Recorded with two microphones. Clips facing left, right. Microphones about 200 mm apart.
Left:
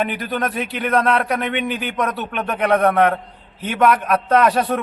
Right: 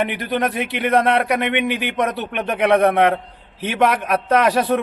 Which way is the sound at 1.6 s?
75° right (ahead or behind).